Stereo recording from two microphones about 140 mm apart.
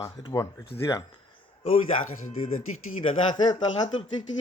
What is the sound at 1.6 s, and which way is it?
Speech, 40° left (ahead or behind).